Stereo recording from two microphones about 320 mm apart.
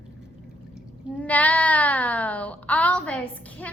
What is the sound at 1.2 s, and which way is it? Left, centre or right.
Speech, centre.